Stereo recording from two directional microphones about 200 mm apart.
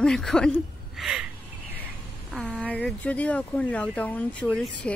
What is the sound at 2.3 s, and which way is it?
Speech, centre (ahead or behind).